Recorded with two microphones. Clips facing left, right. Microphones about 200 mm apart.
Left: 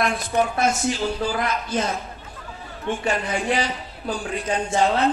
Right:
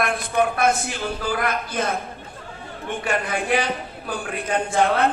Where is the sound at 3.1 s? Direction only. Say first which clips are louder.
Right 3 dB; 55° right (ahead or behind).